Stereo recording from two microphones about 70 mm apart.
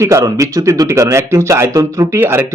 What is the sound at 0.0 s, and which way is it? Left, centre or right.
Speech, right.